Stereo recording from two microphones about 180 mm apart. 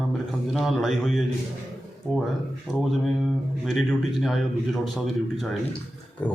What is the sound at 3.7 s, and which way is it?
A man's voice, centre (ahead or behind).